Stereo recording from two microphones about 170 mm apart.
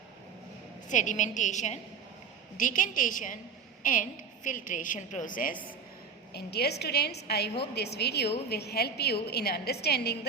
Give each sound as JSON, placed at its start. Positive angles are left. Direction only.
{"t": 0.9, "sound": "a woman's voice", "side_deg": 45}
{"t": 6.3, "sound": "a woman's voice", "side_deg": 75}